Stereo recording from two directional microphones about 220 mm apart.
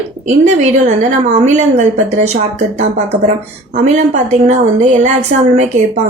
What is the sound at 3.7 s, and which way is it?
Speech, 35° right (ahead or behind).